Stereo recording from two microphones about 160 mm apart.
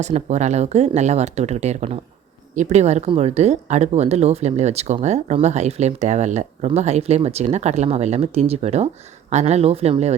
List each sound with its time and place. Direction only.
0.0 s speech: 45° right (ahead or behind)